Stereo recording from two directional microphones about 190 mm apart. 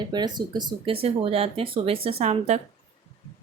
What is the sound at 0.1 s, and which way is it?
Speech, 20° right (ahead or behind).